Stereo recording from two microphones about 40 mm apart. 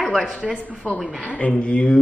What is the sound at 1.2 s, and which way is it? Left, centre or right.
Speech, left.